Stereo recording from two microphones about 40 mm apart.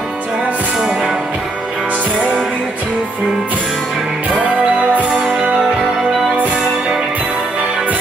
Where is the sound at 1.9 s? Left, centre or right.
Right.